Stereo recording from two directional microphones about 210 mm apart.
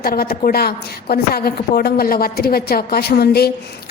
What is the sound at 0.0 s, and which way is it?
A woman's voice, 45° left (ahead or behind).